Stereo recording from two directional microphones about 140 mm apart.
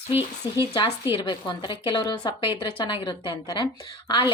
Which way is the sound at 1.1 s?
30° left (ahead or behind).